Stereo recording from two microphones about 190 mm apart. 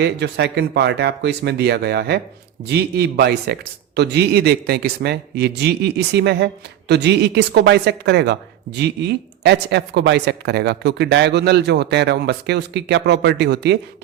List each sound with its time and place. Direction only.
0.0 s speech: 65° right (ahead or behind)